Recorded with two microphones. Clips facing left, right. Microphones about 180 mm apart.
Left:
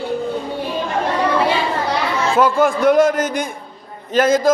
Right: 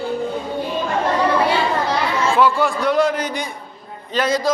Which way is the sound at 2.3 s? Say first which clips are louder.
Left 4 dB; 45° left (ahead or behind).